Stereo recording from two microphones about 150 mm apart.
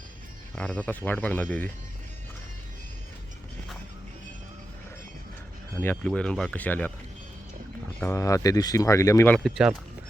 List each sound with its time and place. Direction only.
0.5 s speech: 5° left (ahead or behind)
5.8 s speech: 10° left (ahead or behind)
8.0 s speech: 20° left (ahead or behind)